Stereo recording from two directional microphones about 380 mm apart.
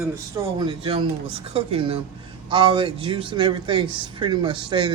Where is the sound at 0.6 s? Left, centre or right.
Centre.